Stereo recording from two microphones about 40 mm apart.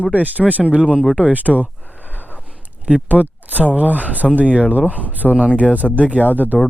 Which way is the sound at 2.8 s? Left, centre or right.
Right.